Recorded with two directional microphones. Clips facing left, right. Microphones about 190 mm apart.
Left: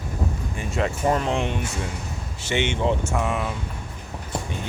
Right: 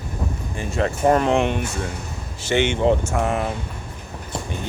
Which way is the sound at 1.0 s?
60° right (ahead or behind).